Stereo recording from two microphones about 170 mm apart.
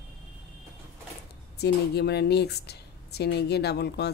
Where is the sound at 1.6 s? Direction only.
75° left (ahead or behind).